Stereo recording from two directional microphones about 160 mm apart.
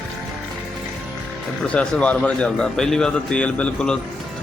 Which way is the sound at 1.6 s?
5° left (ahead or behind).